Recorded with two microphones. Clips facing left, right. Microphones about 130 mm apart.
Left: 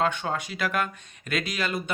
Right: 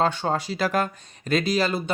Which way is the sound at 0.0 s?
35° right (ahead or behind).